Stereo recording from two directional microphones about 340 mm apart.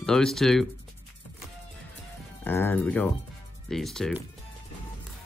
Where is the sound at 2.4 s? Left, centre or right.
Centre.